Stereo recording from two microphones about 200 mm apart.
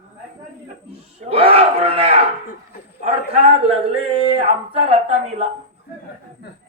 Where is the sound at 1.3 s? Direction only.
30° right (ahead or behind).